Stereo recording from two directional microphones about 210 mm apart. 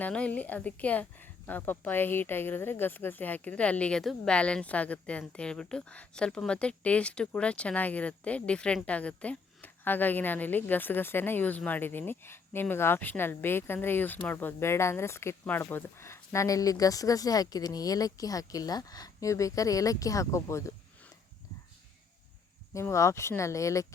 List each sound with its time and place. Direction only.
0.0 s speech: 5° left (ahead or behind)
22.7 s speech: 15° left (ahead or behind)